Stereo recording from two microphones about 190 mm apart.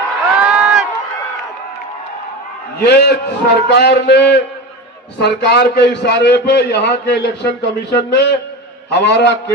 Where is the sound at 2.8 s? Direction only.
60° left (ahead or behind).